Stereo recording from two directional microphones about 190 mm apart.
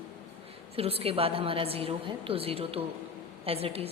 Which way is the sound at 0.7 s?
30° right (ahead or behind).